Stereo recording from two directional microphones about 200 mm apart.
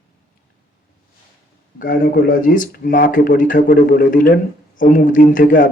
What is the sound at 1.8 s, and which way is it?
Speech, 45° left (ahead or behind).